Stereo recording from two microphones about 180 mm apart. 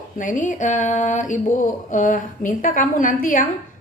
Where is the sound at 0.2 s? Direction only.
45° left (ahead or behind).